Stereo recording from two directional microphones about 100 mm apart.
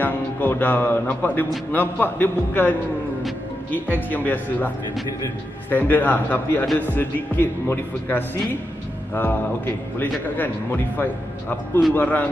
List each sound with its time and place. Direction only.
0.0 s a man's voice: 15° left (ahead or behind)
3.7 s speech: 20° left (ahead or behind)